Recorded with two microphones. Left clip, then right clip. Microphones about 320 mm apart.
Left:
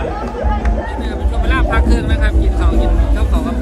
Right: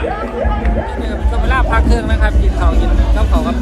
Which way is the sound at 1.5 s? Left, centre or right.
Centre.